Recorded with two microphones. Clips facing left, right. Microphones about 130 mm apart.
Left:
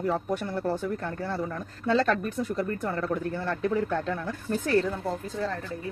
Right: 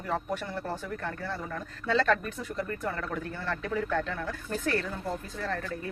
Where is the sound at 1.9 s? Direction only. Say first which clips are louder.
Left 1 dB; 40° left (ahead or behind).